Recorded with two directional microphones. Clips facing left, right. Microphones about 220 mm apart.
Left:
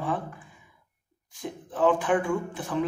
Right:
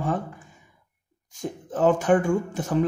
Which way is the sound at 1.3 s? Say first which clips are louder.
Right 2 dB; 45° right (ahead or behind).